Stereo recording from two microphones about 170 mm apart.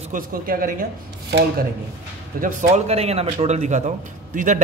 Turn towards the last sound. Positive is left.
turn(degrees=-45)  # may be behind; listen again after turning